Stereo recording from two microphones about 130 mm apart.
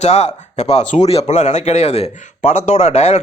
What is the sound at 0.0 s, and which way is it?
Speech, 55° left (ahead or behind).